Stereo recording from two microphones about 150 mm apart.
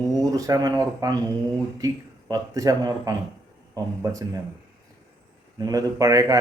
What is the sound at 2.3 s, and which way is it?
A man's voice, 25° right (ahead or behind).